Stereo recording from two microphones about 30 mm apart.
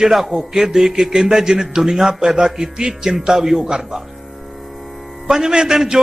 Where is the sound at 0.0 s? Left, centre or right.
Centre.